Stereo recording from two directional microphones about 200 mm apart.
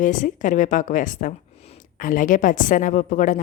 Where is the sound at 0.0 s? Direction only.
40° left (ahead or behind).